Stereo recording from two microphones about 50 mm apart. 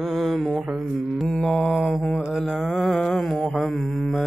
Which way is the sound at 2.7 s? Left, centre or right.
Centre.